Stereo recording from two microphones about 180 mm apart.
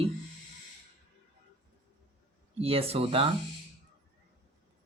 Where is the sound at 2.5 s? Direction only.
35° right (ahead or behind).